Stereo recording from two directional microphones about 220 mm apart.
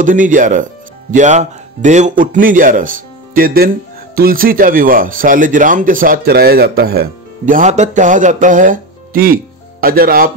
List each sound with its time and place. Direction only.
0.0 s speech: 35° right (ahead or behind)